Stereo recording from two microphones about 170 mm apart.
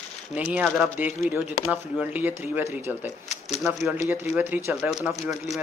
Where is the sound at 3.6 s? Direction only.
Centre (ahead or behind).